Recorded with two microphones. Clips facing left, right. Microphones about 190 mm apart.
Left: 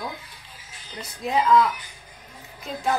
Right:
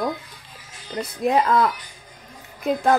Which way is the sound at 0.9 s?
60° right (ahead or behind).